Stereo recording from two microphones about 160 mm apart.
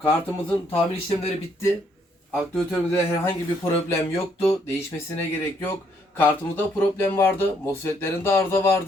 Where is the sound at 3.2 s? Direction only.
15° left (ahead or behind).